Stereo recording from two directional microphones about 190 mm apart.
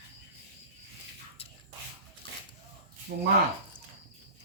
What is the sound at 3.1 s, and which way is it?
Speech, 50° right (ahead or behind).